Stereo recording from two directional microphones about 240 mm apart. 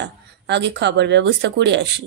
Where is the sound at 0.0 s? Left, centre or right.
Right.